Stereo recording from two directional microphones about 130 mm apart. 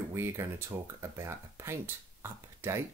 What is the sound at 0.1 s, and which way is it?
Speech, 20° right (ahead or behind).